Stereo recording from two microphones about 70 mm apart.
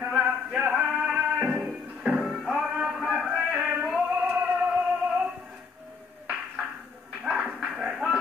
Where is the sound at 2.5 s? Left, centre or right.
Centre.